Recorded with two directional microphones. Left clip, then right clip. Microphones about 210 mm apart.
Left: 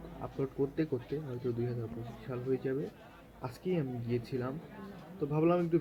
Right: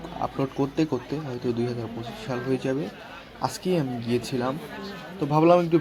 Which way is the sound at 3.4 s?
20° right (ahead or behind).